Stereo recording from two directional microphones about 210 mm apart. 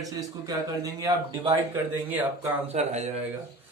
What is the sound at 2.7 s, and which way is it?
Speech, 30° right (ahead or behind).